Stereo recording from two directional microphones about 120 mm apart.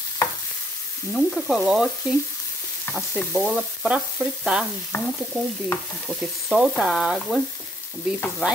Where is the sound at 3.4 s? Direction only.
5° right (ahead or behind).